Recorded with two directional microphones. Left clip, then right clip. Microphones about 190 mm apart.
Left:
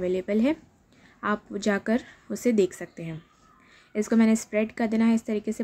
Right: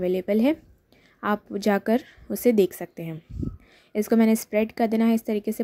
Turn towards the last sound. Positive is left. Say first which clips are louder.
# right 2 dB
turn(degrees=-25)  # may be behind; listen again after turning